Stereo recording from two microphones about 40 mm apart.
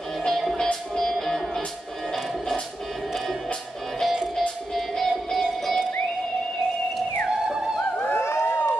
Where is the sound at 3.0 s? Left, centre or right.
Centre.